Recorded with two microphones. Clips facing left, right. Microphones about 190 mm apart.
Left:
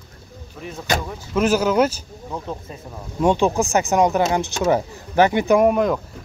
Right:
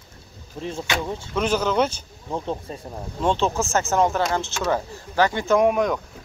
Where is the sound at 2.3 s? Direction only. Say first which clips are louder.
Right 2 dB; 30° right (ahead or behind).